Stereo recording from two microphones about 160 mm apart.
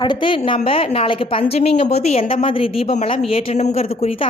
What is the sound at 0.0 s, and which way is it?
A woman's voice, 30° left (ahead or behind).